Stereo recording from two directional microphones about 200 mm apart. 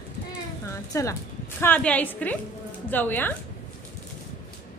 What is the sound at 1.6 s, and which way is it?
A woman's voice, 10° left (ahead or behind).